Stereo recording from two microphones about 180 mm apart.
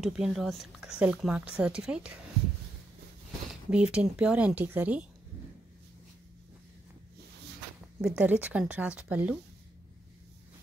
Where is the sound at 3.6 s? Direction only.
5° right (ahead or behind).